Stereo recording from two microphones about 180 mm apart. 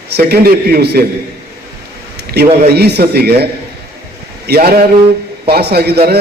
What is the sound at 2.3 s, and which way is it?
A man's voice, 60° right (ahead or behind).